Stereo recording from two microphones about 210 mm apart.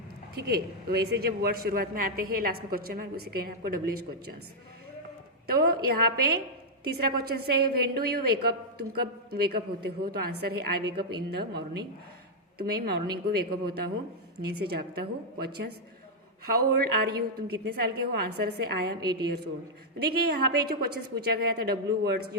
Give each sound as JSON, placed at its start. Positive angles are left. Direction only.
{"t": 0.3, "sound": "a man's voice", "side_deg": -50}
{"t": 5.5, "sound": "a man's voice", "side_deg": -45}
{"t": 20.0, "sound": "a man's voice", "side_deg": -50}